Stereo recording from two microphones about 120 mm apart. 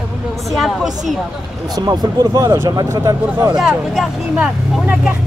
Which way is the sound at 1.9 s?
35° right (ahead or behind).